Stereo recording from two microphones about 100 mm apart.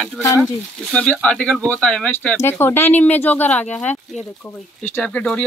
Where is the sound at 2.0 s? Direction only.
20° left (ahead or behind).